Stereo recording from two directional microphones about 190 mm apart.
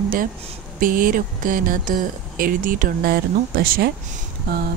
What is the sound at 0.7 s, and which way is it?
Speech, 45° right (ahead or behind).